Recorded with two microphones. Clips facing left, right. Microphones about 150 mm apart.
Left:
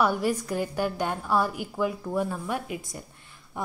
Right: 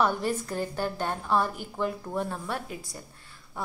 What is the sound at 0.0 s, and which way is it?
A woman's voice, 10° left (ahead or behind).